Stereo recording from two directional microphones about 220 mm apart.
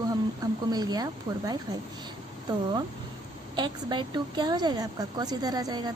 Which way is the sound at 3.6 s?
20° right (ahead or behind).